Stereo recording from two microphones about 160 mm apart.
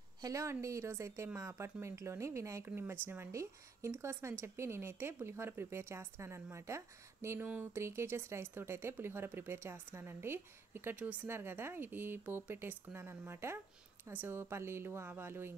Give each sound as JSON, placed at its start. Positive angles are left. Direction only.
{"t": 0.2, "sound": "speech", "side_deg": -20}